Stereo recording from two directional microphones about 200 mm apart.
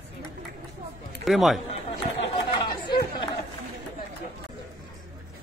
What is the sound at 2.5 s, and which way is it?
Chatter, 25° left (ahead or behind).